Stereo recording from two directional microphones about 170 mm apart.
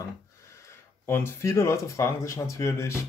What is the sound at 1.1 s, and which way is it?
Speech, 15° left (ahead or behind).